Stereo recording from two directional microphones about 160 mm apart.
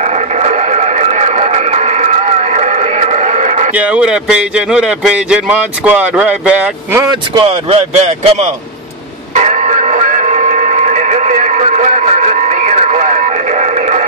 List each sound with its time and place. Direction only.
0.0 s radio: 45° right (ahead or behind)
3.7 s a man's voice: 10° right (ahead or behind)
7.1 s speech: 25° right (ahead or behind)
7.7 s speech: 40° right (ahead or behind)
9.3 s radio: 50° right (ahead or behind)